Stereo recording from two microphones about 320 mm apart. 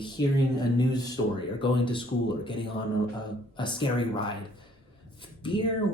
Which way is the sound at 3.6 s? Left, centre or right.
Centre.